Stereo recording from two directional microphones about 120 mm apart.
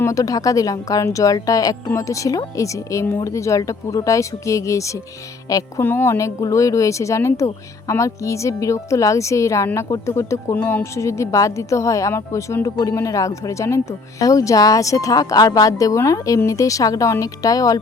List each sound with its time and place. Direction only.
0.0 s speech: 30° left (ahead or behind)
5.8 s speech: 20° left (ahead or behind)